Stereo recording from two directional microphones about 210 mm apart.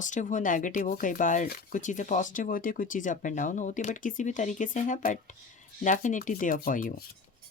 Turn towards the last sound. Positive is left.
turn(degrees=40)  # may be behind; listen again after turning